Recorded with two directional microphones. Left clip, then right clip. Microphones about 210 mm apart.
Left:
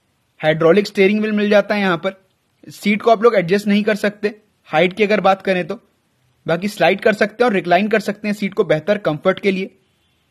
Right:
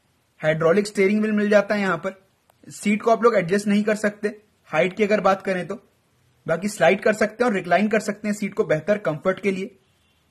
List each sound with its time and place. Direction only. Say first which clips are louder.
0.4 s speech: left 6 dB; 35° left (ahead or behind)